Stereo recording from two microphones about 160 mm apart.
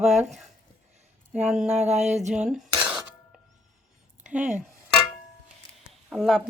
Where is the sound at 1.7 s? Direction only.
45° right (ahead or behind).